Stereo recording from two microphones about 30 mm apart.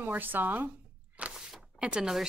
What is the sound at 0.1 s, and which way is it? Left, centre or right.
Speech, right.